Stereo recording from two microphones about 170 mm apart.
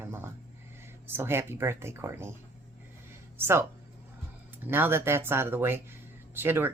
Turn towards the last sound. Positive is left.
turn(degrees=-15)  # may be behind; listen again after turning